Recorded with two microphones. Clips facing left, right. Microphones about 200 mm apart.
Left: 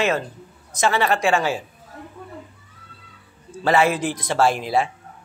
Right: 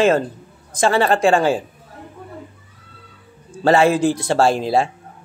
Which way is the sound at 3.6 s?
30° right (ahead or behind).